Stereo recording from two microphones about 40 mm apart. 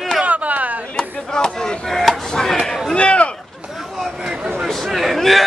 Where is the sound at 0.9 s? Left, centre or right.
Centre.